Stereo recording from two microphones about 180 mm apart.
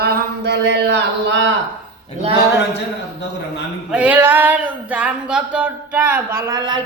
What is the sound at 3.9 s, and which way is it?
Speech, 10° right (ahead or behind).